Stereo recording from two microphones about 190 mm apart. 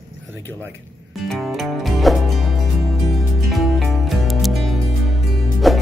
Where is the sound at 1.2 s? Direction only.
Centre (ahead or behind).